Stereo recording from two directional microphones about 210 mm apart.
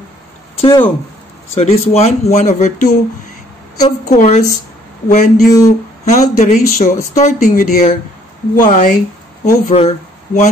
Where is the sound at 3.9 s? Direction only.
35° left (ahead or behind).